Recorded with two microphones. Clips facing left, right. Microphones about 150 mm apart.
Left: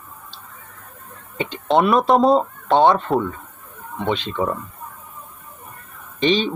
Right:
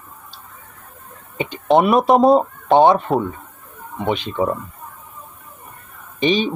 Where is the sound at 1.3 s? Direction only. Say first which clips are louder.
Right 3 dB; 10° right (ahead or behind).